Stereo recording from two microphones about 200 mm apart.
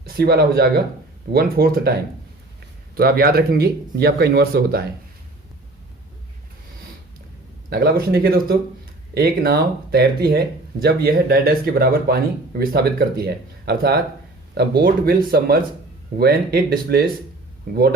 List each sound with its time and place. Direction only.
0.0 s speech: 50° right (ahead or behind)
2.9 s speech: 50° right (ahead or behind)
7.7 s speech: 50° right (ahead or behind)